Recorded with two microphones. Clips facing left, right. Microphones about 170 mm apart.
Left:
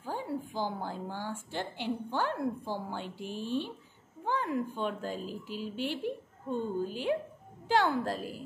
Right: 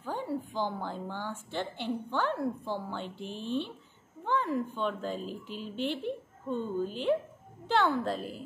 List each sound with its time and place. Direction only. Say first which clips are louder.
0.0 s a sound: right 1 dB; 10° left (ahead or behind)
0.8 s a woman's voice: even; 10° left (ahead or behind)
4.2 s a sound: right 2 dB; 10° left (ahead or behind)
4.8 s a woman's voice: right 2 dB; 10° left (ahead or behind)
6.0 s a woman's voice: right 1 dB; 45° left (ahead or behind)
6.9 s a woman's voice: right 2 dB; 10° left (ahead or behind)